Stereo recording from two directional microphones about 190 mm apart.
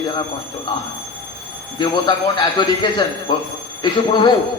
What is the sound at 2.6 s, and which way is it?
A man's voice, 25° left (ahead or behind).